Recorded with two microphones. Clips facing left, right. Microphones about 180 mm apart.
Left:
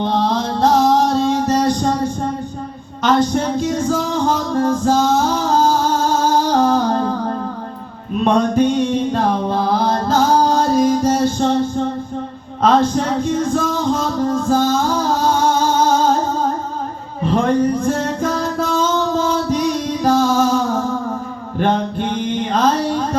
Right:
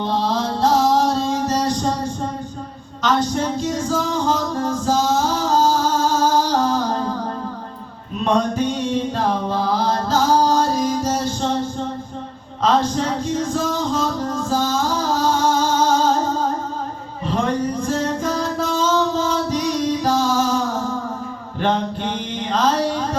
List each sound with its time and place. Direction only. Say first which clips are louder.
0.0 s music: left 3 dB; 55° left (ahead or behind)
3.0 s music: left 4 dB; 55° left (ahead or behind)
8.2 s music: left 4 dB; 55° left (ahead or behind)
12.6 s a sound: left 4 dB; 55° left (ahead or behind)
14.5 s music: left 3 dB; 55° left (ahead or behind)
17.3 s music: left 5 dB; 55° left (ahead or behind)
21.6 s mantra: left 3 dB; 55° left (ahead or behind)